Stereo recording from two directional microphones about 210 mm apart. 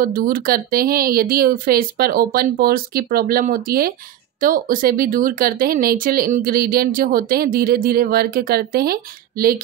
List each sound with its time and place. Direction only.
0.0 s speech: 40° right (ahead or behind)